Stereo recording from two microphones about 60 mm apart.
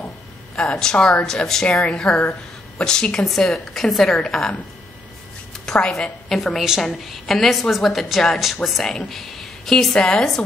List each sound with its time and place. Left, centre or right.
0.6 s a woman's voice: centre
5.7 s a woman's voice: centre
6.2 s a woman's voice: centre